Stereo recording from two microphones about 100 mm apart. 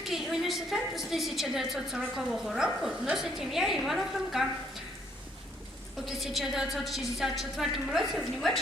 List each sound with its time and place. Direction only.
0.0 s a woman's voice: centre (ahead or behind)
6.1 s a woman's voice: centre (ahead or behind)